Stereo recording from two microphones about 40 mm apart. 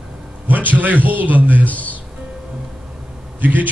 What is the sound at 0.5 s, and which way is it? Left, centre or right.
A man's voice, right.